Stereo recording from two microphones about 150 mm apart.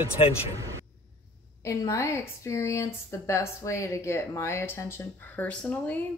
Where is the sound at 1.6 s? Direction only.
20° left (ahead or behind).